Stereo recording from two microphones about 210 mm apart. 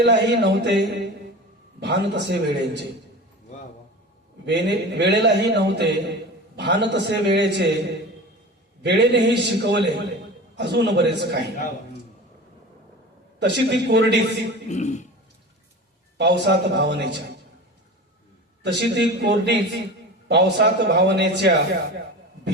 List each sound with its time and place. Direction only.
0.0 s a man's voice: 50° right (ahead or behind)
4.4 s a man's voice: 55° right (ahead or behind)
13.4 s a man's voice: 55° right (ahead or behind)
14.7 s a man's voice: 35° left (ahead or behind)
16.1 s a man's voice: 55° right (ahead or behind)
18.6 s a man's voice: 55° right (ahead or behind)